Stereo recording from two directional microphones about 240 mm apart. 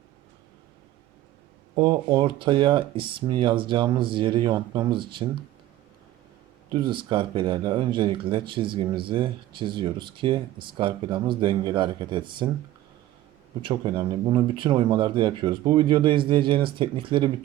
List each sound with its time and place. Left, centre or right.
1.7 s speech: centre
6.7 s speech: centre
13.6 s speech: centre